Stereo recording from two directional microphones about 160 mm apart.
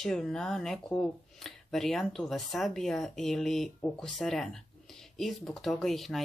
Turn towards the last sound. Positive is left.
turn(degrees=0)  # may be behind; listen again after turning